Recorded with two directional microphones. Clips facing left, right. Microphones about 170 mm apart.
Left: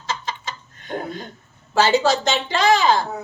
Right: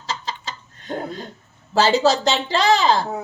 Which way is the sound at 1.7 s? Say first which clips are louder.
Right 1 dB; 35° right (ahead or behind).